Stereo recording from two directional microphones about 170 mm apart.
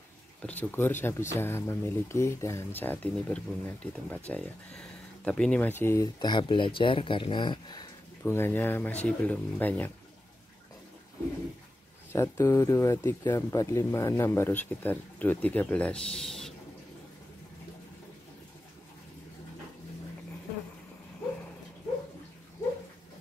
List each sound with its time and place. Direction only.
0.4 s speech: 10° left (ahead or behind)
6.1 s speech: 25° left (ahead or behind)
8.2 s speech: 15° left (ahead or behind)
12.1 s speech: 15° left (ahead or behind)